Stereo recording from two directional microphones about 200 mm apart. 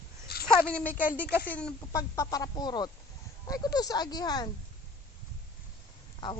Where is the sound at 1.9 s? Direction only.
15° left (ahead or behind).